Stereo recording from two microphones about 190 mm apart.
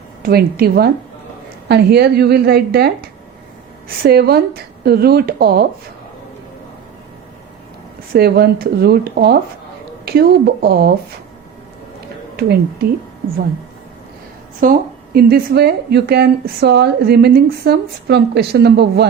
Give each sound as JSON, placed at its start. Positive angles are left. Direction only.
{"t": 0.2, "sound": "a woman's voice", "side_deg": -55}
{"t": 8.1, "sound": "a woman's voice", "side_deg": -55}
{"t": 12.4, "sound": "a woman's voice", "side_deg": -55}
{"t": 14.6, "sound": "a woman's voice", "side_deg": -50}